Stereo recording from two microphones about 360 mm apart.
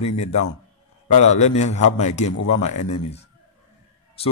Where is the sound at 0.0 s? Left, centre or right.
Left.